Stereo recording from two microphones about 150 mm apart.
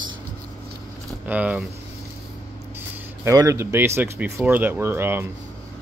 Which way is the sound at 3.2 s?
20° right (ahead or behind).